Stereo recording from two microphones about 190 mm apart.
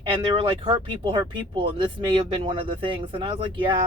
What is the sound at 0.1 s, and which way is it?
Speech, 25° right (ahead or behind).